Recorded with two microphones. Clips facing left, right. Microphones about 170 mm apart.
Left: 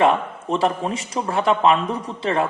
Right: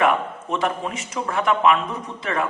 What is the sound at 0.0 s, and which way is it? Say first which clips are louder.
Speech: left 2 dB; 30° left (ahead or behind).